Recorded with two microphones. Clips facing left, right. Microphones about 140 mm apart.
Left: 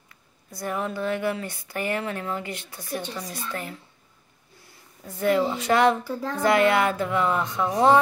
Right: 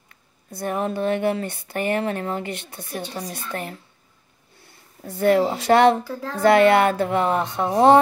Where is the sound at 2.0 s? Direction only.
40° right (ahead or behind).